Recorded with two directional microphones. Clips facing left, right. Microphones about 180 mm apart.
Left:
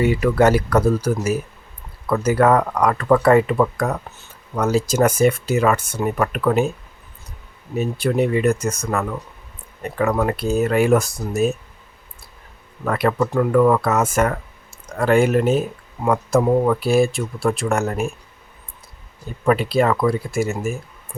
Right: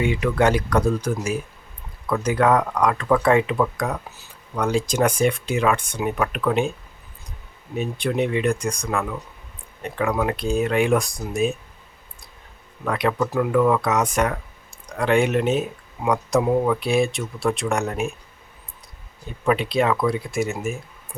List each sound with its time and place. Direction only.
0.2 s speech: 5° left (ahead or behind)
7.8 s speech: 5° left (ahead or behind)
12.8 s speech: centre (ahead or behind)
19.5 s speech: centre (ahead or behind)